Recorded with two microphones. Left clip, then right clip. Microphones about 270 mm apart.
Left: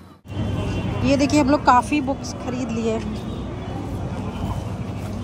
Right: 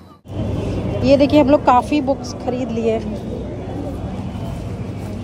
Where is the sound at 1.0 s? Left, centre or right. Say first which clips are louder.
Right 6 dB; centre.